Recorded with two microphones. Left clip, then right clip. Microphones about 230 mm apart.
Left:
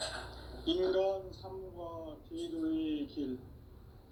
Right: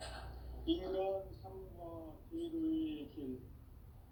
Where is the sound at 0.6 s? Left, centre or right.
Left.